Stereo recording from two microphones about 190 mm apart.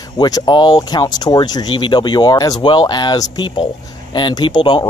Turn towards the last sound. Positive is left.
turn(degrees=25)  # may be behind; listen again after turning